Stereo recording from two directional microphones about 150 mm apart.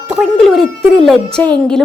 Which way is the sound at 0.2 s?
5° left (ahead or behind).